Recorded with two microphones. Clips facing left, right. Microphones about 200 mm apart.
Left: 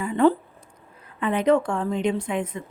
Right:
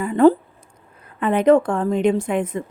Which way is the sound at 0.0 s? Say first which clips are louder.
Right 5 dB; 45° right (ahead or behind).